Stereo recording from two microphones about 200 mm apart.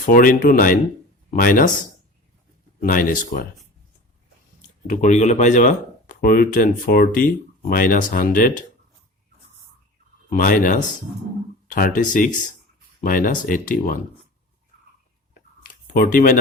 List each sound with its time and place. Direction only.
0.0 s speech: 45° left (ahead or behind)
2.8 s speech: 45° left (ahead or behind)
4.9 s speech: 40° left (ahead or behind)
10.2 s speech: 40° left (ahead or behind)
15.6 s a sound: 45° left (ahead or behind)